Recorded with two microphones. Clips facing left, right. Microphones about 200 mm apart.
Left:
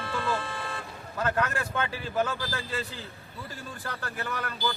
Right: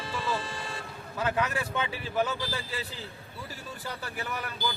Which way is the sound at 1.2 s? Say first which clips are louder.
Left 1 dB; 5° right (ahead or behind).